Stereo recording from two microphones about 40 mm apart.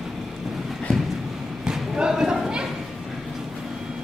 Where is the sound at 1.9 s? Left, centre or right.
Centre.